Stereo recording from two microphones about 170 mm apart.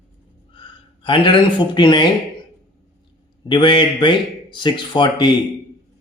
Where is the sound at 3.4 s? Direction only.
30° left (ahead or behind).